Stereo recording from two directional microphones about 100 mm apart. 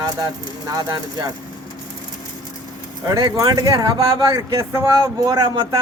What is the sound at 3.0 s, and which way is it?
Speech, 35° right (ahead or behind).